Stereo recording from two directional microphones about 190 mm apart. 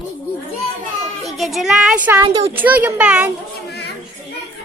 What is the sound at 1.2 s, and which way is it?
A child's voice, centre (ahead or behind).